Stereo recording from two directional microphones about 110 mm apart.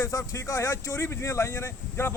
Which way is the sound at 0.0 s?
30° left (ahead or behind).